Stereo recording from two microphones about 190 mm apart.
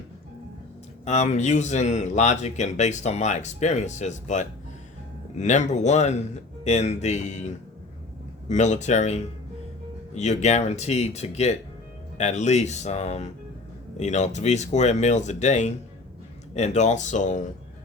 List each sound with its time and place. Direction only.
1.0 s speech: 35° left (ahead or behind)